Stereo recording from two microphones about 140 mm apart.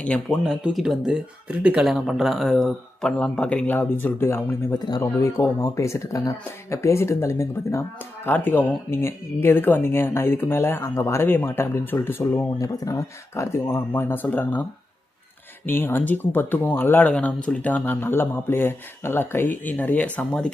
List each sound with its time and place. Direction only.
0.0 s speech: 10° left (ahead or behind)
0.4 s speech: 5° right (ahead or behind); by 4.8 s 15° left (ahead or behind)
4.8 s speech: 30° left (ahead or behind)
15.6 s speech: 15° left (ahead or behind)